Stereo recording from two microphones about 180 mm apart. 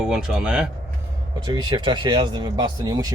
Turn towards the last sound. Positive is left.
turn(degrees=-20)  # may be behind; listen again after turning